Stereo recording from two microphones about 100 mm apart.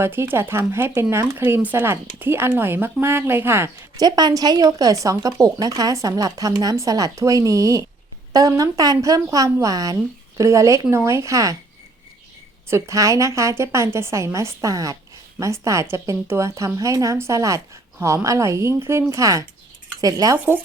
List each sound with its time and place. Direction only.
0.0 s speech: 20° right (ahead or behind)
3.9 s a woman's voice: 40° right (ahead or behind)
12.7 s a woman's voice: 30° right (ahead or behind)